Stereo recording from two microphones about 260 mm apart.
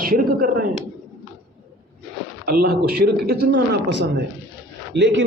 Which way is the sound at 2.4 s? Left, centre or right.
Right.